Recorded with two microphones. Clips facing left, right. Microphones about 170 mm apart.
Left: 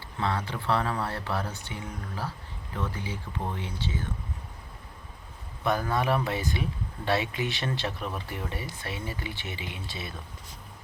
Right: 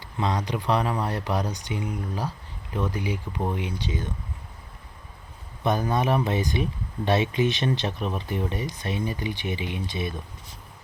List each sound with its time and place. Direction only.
0.2 s speech: 15° right (ahead or behind)
5.6 s speech: 20° right (ahead or behind)